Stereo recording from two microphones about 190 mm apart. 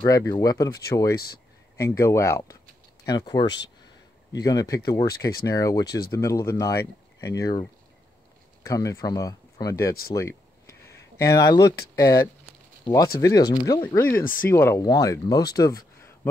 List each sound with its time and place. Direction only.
0.0 s speech: 20° left (ahead or behind)
1.1 s speech: 55° left (ahead or behind)
1.8 s speech: 15° left (ahead or behind)
8.6 s speech: 15° left (ahead or behind)
10.1 s a sound: 15° left (ahead or behind)
11.1 s speech: 20° left (ahead or behind)
14.2 s speech: 45° left (ahead or behind)
14.5 s speech: 15° left (ahead or behind)